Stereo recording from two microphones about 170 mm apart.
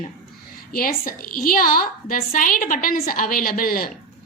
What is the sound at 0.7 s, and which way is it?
A woman's voice, 60° left (ahead or behind).